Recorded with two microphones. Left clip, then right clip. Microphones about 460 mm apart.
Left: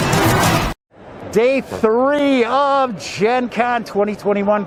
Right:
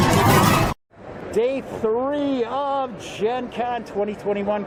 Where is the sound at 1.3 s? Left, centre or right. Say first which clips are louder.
Left 7 dB; left.